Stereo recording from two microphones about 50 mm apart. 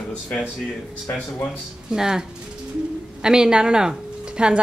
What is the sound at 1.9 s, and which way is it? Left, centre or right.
A woman's voice, centre.